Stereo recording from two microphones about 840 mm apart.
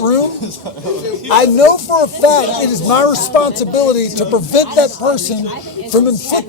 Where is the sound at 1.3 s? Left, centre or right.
Left.